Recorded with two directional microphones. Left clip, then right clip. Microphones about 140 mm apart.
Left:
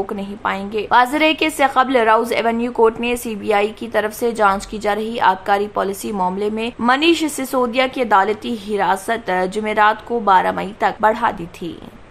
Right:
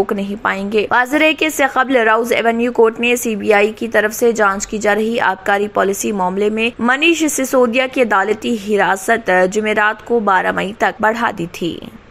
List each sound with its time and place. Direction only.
0.0 s a woman's voice: 30° right (ahead or behind)